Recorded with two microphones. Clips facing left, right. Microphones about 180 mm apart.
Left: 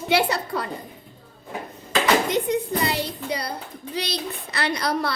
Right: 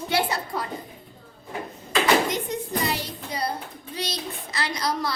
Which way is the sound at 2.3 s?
65° left (ahead or behind).